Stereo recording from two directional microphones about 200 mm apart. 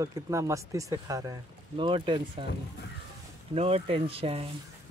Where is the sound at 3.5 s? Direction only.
30° right (ahead or behind).